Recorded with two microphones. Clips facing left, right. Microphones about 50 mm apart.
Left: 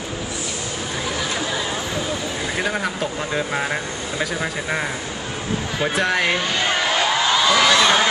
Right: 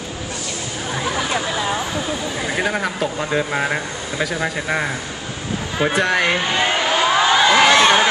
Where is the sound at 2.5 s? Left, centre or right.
Centre.